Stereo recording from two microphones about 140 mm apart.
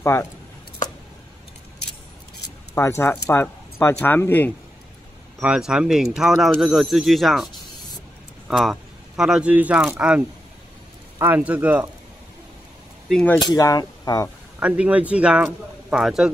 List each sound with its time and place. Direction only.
0.0 s speech: 20° left (ahead or behind)
2.7 s speech: 20° left (ahead or behind)
5.4 s speech: 5° right (ahead or behind)
8.5 s a man's voice: centre (ahead or behind)
13.1 s speech: 10° left (ahead or behind)
13.4 s speech: 25° left (ahead or behind)
14.6 s a man's voice: 10° right (ahead or behind)